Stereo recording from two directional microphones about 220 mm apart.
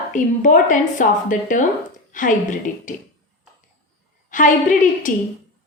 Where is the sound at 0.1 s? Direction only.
35° left (ahead or behind).